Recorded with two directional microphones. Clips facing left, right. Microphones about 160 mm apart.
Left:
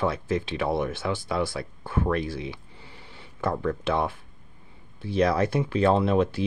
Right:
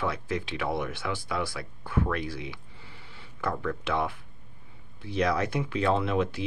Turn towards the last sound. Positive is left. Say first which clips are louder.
# left 5 dB
turn(degrees=30)  # may be behind; listen again after turning